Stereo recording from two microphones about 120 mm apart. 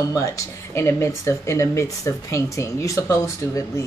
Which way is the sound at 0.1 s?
30° left (ahead or behind).